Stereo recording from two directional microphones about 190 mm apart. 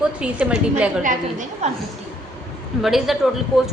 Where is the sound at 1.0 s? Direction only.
40° right (ahead or behind).